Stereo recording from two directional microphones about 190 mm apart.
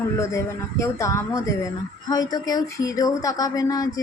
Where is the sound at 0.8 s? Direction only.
15° left (ahead or behind).